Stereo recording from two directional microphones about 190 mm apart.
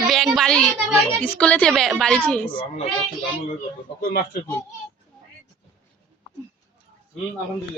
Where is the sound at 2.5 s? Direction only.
25° left (ahead or behind).